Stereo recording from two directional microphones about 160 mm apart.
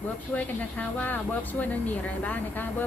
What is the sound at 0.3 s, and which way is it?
Speech, 10° left (ahead or behind).